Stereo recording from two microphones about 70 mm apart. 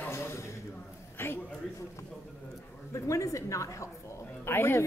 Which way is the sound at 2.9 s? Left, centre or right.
Left.